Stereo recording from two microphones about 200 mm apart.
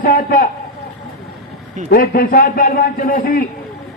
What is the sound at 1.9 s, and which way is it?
A man's voice, 50° left (ahead or behind).